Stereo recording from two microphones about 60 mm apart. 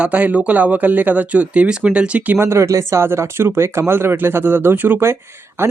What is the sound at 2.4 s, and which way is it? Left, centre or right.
Speech, right.